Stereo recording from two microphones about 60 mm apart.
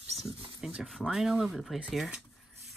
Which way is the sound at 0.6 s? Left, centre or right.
Centre.